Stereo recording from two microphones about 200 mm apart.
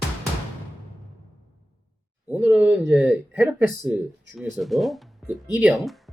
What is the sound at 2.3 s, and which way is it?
Speech, 10° right (ahead or behind).